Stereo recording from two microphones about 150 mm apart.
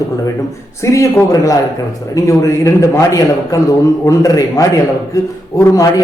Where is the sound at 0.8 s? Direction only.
20° left (ahead or behind).